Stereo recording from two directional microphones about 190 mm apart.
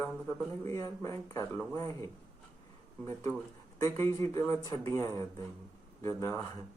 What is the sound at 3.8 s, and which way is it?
Speech, 15° left (ahead or behind).